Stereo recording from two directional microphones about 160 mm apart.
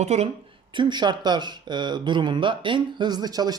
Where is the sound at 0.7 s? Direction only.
30° right (ahead or behind).